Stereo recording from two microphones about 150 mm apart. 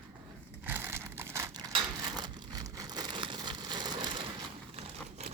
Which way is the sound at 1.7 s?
30° right (ahead or behind).